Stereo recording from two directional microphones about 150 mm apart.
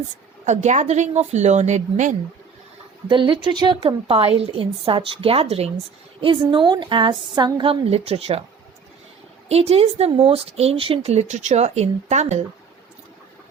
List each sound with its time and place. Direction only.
0.4 s speech: 50° right (ahead or behind)
3.1 s a woman's voice: 30° right (ahead or behind)
6.2 s a woman's voice: 35° right (ahead or behind)
9.5 s speech: 45° right (ahead or behind)